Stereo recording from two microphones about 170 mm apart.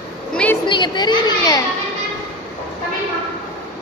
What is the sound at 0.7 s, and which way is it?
Chatter, 25° left (ahead or behind).